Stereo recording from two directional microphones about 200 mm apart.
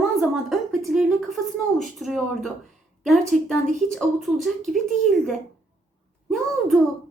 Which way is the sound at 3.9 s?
Centre (ahead or behind).